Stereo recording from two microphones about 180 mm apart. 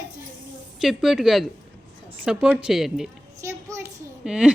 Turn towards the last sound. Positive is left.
turn(degrees=-5)  # may be behind; listen again after turning